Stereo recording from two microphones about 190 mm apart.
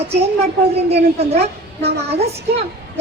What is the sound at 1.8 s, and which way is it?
Speech, 60° right (ahead or behind).